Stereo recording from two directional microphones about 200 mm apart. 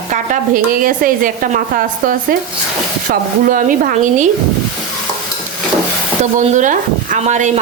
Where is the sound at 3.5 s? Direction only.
45° right (ahead or behind).